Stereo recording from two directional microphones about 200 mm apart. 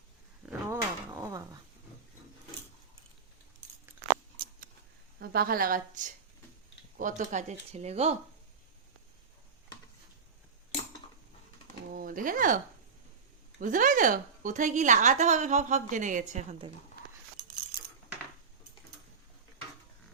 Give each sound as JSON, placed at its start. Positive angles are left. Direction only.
{"t": 0.6, "sound": "a sound", "side_deg": -15}
{"t": 5.2, "sound": "a woman's voice", "side_deg": -50}
{"t": 11.9, "sound": "speech", "side_deg": -45}
{"t": 13.6, "sound": "a woman's voice", "side_deg": -40}